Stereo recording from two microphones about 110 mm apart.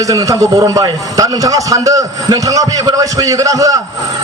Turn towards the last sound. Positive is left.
turn(degrees=-30)  # may be behind; listen again after turning